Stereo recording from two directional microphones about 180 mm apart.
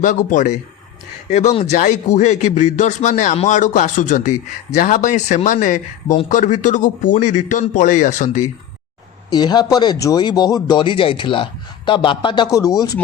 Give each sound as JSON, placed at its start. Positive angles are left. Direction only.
{"t": 0.0, "sound": "speech", "side_deg": 45}
{"t": 9.3, "sound": "speech", "side_deg": 20}